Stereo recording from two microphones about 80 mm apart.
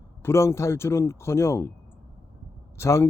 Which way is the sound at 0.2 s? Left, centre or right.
Left.